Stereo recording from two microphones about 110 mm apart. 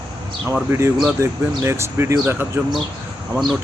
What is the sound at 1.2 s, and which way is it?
Speech, 25° right (ahead or behind).